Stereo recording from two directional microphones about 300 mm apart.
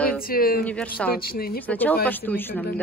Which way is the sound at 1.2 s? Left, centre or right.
Left.